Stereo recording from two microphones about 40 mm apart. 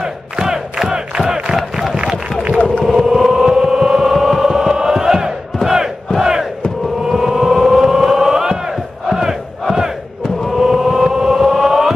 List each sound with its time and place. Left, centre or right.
0.0 s crowd: centre
1.1 s battle cry: right
2.8 s a sound: centre
7.1 s civil defense siren: centre
10.6 s chant: centre